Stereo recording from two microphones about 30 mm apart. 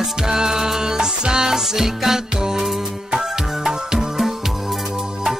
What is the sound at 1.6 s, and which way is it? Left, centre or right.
Music, centre.